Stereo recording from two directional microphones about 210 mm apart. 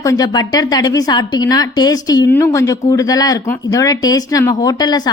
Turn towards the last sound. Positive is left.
turn(degrees=20)  # may be behind; listen again after turning